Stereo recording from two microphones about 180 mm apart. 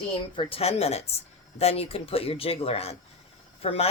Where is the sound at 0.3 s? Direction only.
35° left (ahead or behind).